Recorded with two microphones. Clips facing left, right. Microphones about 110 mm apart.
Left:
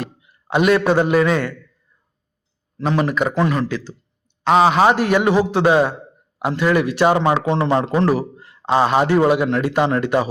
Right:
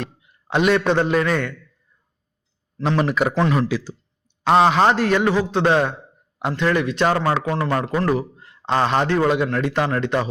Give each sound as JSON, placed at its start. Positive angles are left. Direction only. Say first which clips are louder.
{"t": 0.0, "sound": "a man's voice", "louder": "left 2 dB", "side_deg": 5}
{"t": 2.7, "sound": "a man's voice", "louder": "left 1 dB", "side_deg": 10}
{"t": 7.4, "sound": "a man's voice", "louder": "left 4 dB", "side_deg": 25}
{"t": 8.4, "sound": "a man's voice", "louder": "left 3 dB", "side_deg": 5}